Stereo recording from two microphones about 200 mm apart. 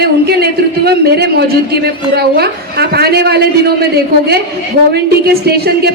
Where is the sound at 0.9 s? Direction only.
55° right (ahead or behind).